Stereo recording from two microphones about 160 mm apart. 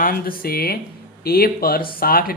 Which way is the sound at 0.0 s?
65° left (ahead or behind).